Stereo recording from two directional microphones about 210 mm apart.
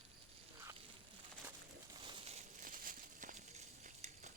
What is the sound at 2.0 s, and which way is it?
Crumpling, 25° right (ahead or behind).